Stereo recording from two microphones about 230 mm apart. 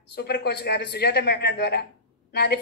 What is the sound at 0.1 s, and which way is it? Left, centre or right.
A woman's voice, left.